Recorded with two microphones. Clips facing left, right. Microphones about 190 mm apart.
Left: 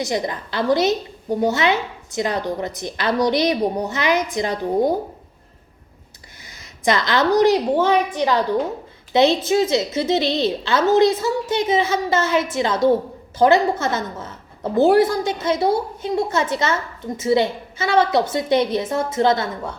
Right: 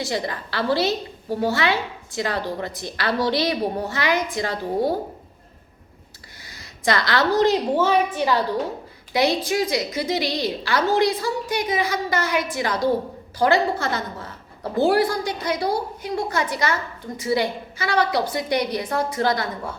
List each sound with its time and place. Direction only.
0.0 s a woman's voice: 20° left (ahead or behind)
6.5 s a woman's voice: 20° left (ahead or behind)